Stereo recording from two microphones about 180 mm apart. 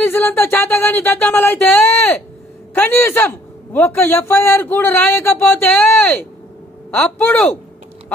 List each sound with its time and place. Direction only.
0.0 s a man's voice: 10° left (ahead or behind)